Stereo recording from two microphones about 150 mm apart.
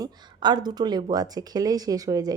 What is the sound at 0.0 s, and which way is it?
A woman's voice, 30° right (ahead or behind).